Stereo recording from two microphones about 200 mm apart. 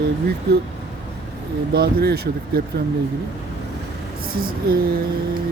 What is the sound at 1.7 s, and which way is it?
Speech, 50° right (ahead or behind).